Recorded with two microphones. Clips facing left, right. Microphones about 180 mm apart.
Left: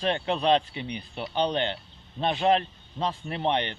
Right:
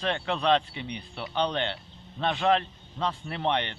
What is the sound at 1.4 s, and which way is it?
A man's voice, 40° left (ahead or behind).